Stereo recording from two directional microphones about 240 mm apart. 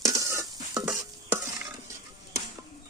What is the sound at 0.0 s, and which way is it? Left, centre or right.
Stir, centre.